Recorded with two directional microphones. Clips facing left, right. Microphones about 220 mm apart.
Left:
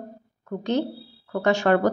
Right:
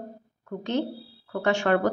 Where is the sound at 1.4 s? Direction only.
40° left (ahead or behind).